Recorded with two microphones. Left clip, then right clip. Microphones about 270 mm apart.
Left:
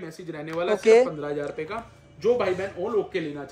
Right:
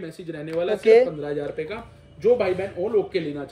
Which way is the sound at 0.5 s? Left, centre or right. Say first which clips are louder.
Right 1 dB; left.